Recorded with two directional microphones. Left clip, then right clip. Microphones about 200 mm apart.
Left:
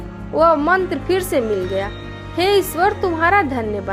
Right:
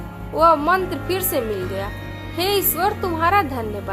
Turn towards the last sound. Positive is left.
turn(degrees=25)  # may be behind; listen again after turning